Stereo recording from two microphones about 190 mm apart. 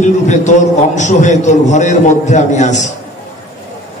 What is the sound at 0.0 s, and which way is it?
A man's voice, 40° left (ahead or behind).